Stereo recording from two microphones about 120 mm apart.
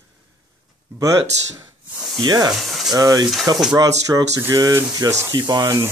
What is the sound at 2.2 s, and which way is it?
Speech, 35° right (ahead or behind).